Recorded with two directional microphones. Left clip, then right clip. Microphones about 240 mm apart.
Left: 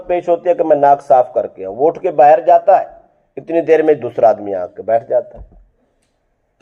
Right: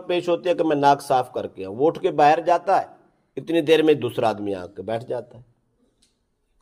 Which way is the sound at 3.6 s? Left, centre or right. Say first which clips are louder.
Left 6 dB; right.